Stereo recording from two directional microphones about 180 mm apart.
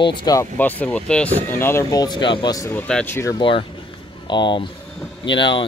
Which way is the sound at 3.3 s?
30° left (ahead or behind).